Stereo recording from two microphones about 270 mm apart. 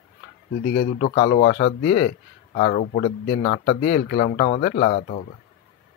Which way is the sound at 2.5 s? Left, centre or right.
Left.